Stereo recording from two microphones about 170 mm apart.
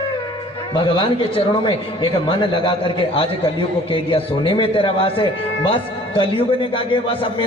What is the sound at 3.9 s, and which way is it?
A man's voice, 30° left (ahead or behind).